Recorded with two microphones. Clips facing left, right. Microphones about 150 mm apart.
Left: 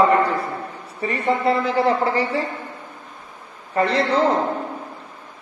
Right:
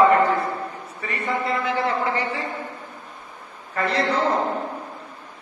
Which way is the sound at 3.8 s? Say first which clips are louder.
Left 4 dB; 30° left (ahead or behind).